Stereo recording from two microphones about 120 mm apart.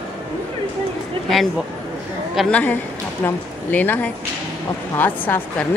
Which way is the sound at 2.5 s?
10° left (ahead or behind).